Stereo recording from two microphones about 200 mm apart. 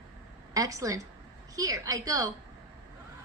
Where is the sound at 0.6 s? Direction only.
15° right (ahead or behind).